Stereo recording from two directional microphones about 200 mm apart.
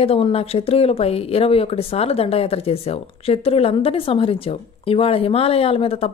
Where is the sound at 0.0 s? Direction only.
30° left (ahead or behind).